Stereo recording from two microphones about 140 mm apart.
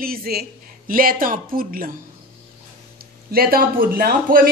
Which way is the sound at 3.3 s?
90° right.